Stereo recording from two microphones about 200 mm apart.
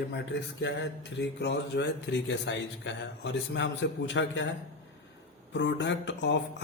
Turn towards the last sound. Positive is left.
turn(degrees=65)  # may be behind; listen again after turning